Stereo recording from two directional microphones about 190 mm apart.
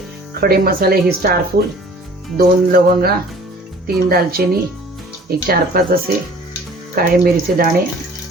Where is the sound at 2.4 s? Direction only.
55° right (ahead or behind).